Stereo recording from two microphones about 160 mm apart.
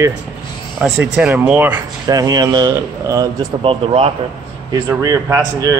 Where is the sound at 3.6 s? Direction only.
35° right (ahead or behind).